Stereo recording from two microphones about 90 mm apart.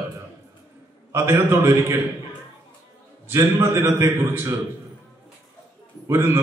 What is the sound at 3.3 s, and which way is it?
A man's voice, 30° right (ahead or behind).